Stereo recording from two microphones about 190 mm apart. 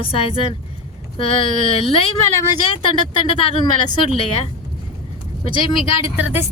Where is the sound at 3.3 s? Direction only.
30° left (ahead or behind).